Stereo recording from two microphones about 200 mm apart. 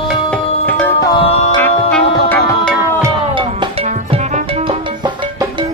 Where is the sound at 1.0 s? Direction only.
25° left (ahead or behind).